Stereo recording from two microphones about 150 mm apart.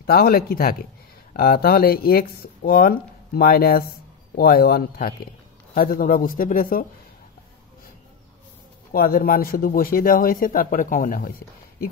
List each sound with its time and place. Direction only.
0.0 s speech: 90° left
5.8 s speech: 75° left (ahead or behind)
8.9 s speech: 75° left (ahead or behind)